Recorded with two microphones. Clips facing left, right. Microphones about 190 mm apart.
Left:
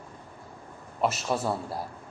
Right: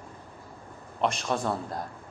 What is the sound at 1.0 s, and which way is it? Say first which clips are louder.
Speech: even; 5° left (ahead or behind).